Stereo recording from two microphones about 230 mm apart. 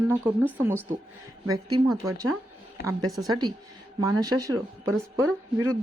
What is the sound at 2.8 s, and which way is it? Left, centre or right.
Speech, left.